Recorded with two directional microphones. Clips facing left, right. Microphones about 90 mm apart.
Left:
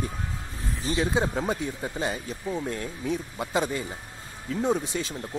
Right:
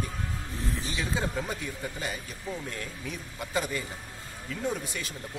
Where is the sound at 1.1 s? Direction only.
25° left (ahead or behind).